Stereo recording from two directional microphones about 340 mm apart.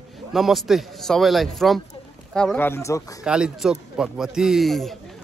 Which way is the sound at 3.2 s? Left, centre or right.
Centre.